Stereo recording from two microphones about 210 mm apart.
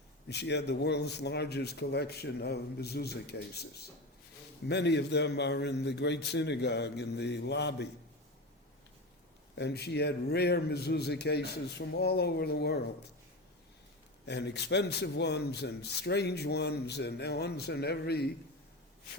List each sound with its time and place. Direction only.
0.3 s a man's voice: 55° left (ahead or behind)
9.6 s a man's voice: 50° left (ahead or behind)
14.3 s a man's voice: 55° left (ahead or behind)